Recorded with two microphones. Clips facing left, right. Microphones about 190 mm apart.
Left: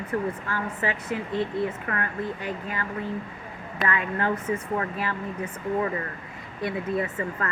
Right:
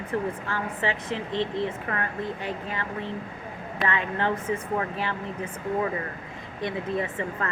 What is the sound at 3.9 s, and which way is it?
A woman's voice, 25° right (ahead or behind).